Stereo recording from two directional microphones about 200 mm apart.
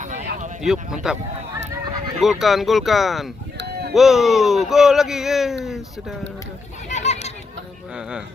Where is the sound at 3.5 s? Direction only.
55° right (ahead or behind).